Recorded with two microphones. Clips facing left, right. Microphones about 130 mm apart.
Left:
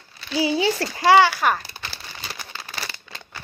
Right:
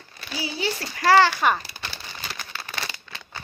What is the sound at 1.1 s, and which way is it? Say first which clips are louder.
Speech: left 1 dB; 5° left (ahead or behind).